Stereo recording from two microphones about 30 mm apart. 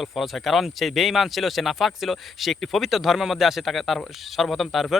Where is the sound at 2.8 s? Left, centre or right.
Centre.